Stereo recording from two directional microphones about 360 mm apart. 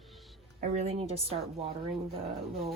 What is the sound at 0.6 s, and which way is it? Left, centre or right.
A woman's voice, centre.